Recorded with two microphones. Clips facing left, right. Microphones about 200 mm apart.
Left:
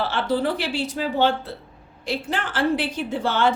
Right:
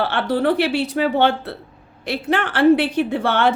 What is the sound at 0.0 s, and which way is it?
A woman's voice, 60° right (ahead or behind).